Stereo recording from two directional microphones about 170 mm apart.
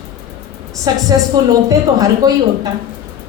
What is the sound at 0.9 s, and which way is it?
A woman's voice, 25° right (ahead or behind).